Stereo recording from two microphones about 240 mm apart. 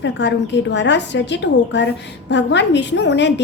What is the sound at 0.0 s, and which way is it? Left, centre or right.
A woman's voice, left.